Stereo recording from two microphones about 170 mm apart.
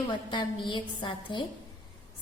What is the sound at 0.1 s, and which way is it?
A woman's voice, 25° left (ahead or behind).